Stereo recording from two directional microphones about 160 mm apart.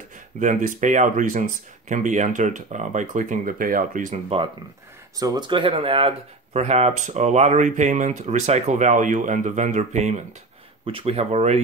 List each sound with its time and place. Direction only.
0.4 s speech: 55° right (ahead or behind)
5.2 s speech: 25° right (ahead or behind)